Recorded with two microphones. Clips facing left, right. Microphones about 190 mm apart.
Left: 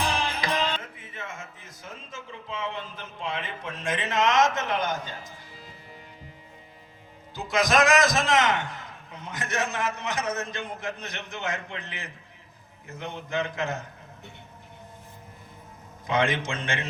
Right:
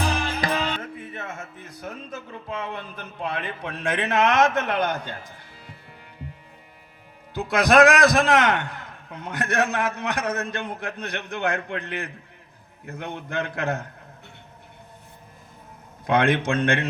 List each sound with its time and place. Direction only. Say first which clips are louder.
0.4 s music: right 2 dB; 55° right (ahead or behind)
7.3 s a man's voice: right 6 dB; 60° right (ahead or behind)
16.0 s a man's voice: right 5 dB; 60° right (ahead or behind)